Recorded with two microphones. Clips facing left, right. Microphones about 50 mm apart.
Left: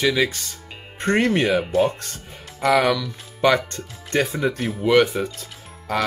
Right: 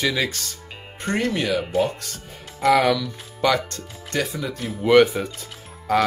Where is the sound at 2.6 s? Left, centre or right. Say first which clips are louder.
Right 1 dB; centre.